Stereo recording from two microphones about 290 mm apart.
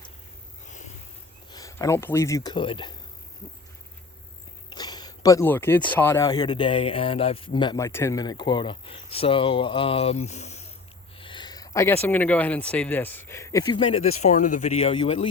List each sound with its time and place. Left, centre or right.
1.5 s speech: centre
4.7 s speech: centre
11.2 s a sound: centre
12.0 s speech: centre